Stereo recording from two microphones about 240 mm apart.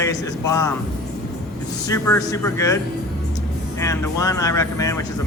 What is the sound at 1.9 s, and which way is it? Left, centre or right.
Speech, centre.